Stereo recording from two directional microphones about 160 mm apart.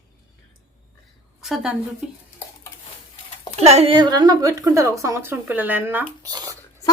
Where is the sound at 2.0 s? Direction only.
5° right (ahead or behind).